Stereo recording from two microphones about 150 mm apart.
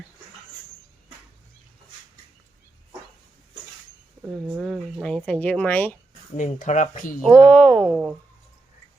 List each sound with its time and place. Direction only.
4.2 s speech: 10° right (ahead or behind); by 6.0 s 10° left (ahead or behind)
6.3 s speech: 55° left (ahead or behind)
7.4 s speech: 10° left (ahead or behind)
7.8 s speech: 10° right (ahead or behind)